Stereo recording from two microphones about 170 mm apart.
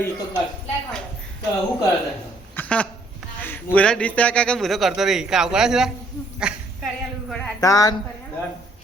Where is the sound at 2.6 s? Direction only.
5° left (ahead or behind).